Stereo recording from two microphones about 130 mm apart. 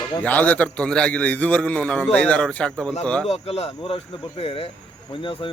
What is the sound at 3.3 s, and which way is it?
A man's voice, 50° left (ahead or behind).